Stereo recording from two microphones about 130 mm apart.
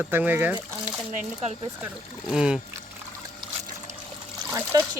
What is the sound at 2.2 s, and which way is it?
Speech, 5° right (ahead or behind).